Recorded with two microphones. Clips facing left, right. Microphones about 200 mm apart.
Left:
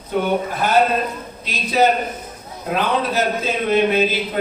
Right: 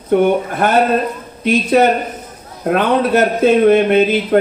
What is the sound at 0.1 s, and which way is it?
Speech, 55° right (ahead or behind).